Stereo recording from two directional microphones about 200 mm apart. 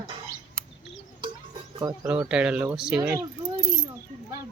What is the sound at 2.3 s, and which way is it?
Speech, 5° right (ahead or behind).